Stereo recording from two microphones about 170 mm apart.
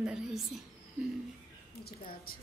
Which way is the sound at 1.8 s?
60° left (ahead or behind).